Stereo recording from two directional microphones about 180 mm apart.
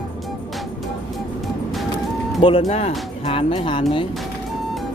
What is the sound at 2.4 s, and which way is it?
Speech, 30° left (ahead or behind).